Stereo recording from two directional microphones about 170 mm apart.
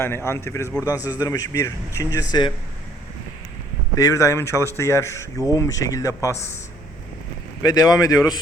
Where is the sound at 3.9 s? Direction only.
20° left (ahead or behind).